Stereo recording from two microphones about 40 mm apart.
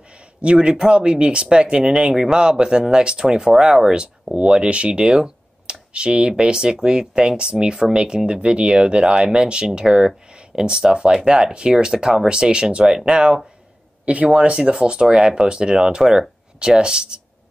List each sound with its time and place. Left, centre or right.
0.1 s a sound: right
0.7 s speech: right
4.4 s speech: right
14.0 s speech: right